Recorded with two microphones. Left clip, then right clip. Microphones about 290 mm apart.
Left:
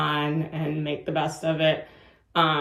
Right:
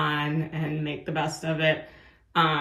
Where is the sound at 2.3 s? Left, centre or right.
Centre.